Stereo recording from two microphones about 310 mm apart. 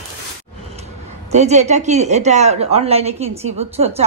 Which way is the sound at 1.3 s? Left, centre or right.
Right.